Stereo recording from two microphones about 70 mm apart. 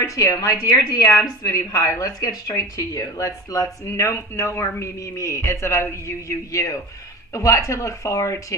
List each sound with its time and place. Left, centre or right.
0.0 s a woman's voice: left